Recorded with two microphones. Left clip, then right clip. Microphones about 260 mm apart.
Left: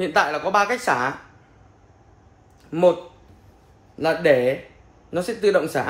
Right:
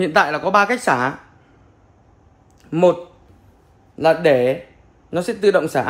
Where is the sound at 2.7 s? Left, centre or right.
Right.